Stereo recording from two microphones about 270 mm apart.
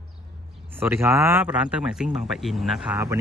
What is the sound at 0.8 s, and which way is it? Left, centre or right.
Speech, centre.